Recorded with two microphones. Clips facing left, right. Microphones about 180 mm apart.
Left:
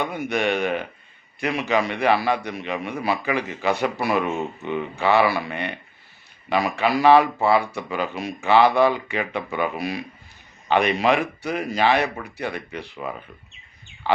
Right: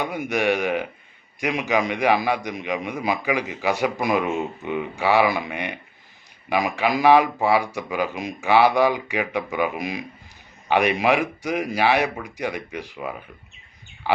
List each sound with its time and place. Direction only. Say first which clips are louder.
0.0 s a man's voice: even; 10° right (ahead or behind)